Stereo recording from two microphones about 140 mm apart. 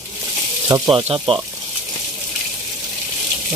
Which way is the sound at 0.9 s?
40° right (ahead or behind).